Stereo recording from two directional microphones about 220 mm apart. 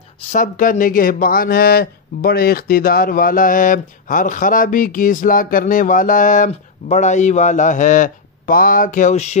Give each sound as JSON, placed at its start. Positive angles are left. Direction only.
{"t": 0.3, "sound": "speech", "side_deg": 35}